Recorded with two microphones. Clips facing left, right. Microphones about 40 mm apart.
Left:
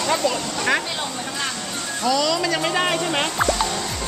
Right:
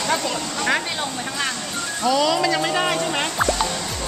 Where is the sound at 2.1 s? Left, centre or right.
Centre.